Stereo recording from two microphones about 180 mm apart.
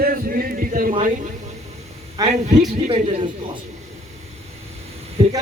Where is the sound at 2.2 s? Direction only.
20° right (ahead or behind).